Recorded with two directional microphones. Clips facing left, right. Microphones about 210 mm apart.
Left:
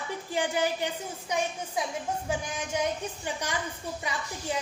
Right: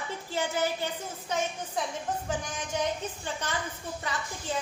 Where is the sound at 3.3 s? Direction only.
15° left (ahead or behind).